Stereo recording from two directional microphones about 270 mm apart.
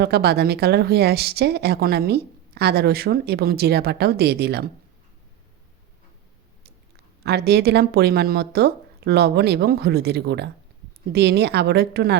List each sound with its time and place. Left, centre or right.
0.0 s speech: right
7.3 s speech: right